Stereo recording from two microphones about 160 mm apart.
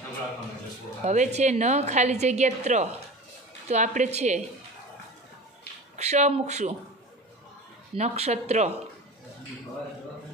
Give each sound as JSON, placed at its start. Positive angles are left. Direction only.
{"t": 1.0, "sound": "a woman's voice", "side_deg": -45}
{"t": 5.9, "sound": "a woman's voice", "side_deg": -45}
{"t": 7.9, "sound": "a woman's voice", "side_deg": -40}